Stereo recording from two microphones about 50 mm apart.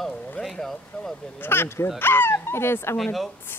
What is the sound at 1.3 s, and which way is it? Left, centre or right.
Speech, left.